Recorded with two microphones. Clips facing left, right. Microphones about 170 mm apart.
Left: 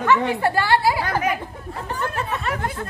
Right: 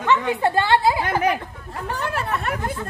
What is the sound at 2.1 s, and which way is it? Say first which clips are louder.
Speech: right 1 dB; 65° right (ahead or behind).